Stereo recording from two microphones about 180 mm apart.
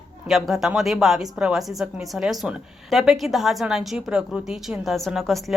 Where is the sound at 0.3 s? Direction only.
Centre (ahead or behind).